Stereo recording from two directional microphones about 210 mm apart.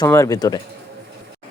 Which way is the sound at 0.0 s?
15° left (ahead or behind).